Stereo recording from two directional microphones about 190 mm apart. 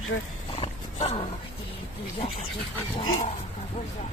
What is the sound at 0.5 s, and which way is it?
Roaring cats, 30° left (ahead or behind).